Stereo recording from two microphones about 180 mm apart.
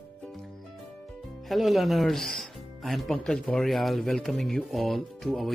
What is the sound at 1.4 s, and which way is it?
Speech, centre (ahead or behind).